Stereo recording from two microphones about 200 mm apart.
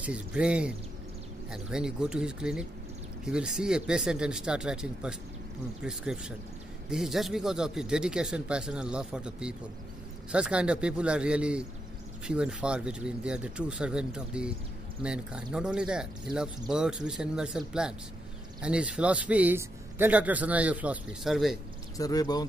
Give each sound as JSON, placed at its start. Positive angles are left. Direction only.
{"t": 0.0, "sound": "a man's voice", "side_deg": -5}
{"t": 21.9, "sound": "speech", "side_deg": 15}